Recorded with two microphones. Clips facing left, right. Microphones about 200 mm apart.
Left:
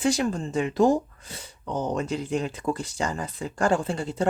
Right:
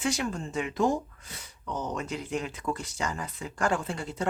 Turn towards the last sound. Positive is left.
turn(degrees=30)  # may be behind; listen again after turning